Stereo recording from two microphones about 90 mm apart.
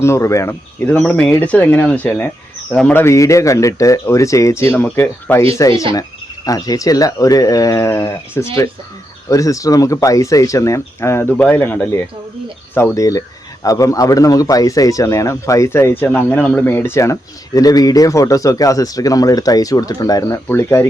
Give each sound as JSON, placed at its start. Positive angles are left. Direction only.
{"t": 0.0, "sound": "speech", "side_deg": 30}
{"t": 0.9, "sound": "speech", "side_deg": 15}
{"t": 2.6, "sound": "speech", "side_deg": 5}
{"t": 2.9, "sound": "speech", "side_deg": 30}
{"t": 4.9, "sound": "speech", "side_deg": 20}
{"t": 5.5, "sound": "speech", "side_deg": 35}
{"t": 11.3, "sound": "speech", "side_deg": 15}
{"t": 13.0, "sound": "speech", "side_deg": 40}